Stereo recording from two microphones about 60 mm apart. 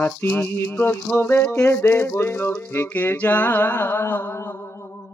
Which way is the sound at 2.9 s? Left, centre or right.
Left.